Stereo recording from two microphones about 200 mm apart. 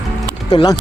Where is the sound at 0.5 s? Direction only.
20° left (ahead or behind).